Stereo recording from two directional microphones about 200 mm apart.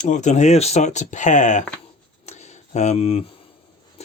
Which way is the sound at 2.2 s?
35° left (ahead or behind).